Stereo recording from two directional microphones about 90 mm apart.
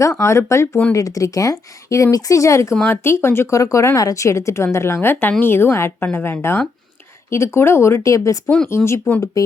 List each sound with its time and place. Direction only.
0.0 s speech: 35° left (ahead or behind)
8.4 s speech: 5° left (ahead or behind)
8.7 s speech: 30° left (ahead or behind)